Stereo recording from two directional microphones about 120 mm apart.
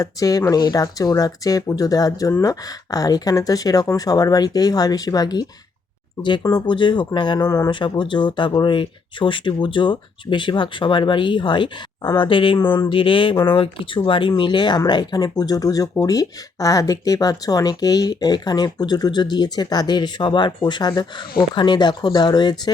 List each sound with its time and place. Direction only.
0.0 s speech: 30° left (ahead or behind)
6.7 s speech: 40° left (ahead or behind)
7.7 s speech: 40° left (ahead or behind)